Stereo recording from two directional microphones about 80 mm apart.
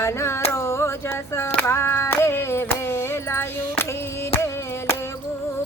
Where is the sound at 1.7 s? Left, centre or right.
Left.